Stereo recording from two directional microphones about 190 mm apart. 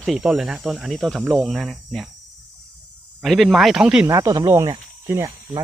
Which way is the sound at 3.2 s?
Centre (ahead or behind).